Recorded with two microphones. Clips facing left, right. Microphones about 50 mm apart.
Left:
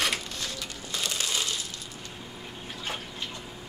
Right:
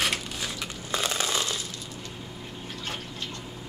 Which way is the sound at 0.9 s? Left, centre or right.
Right.